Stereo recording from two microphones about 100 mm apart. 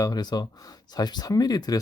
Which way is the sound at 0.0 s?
40° left (ahead or behind).